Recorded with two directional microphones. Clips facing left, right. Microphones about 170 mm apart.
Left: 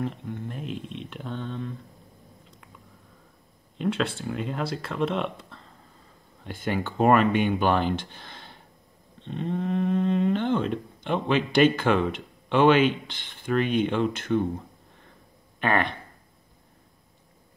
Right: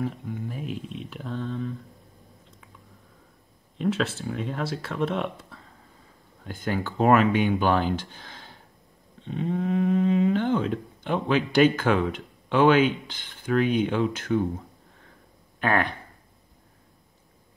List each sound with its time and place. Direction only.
0.0 s speech: 5° right (ahead or behind)
3.7 s speech: centre (ahead or behind)
15.6 s speech: 5° right (ahead or behind)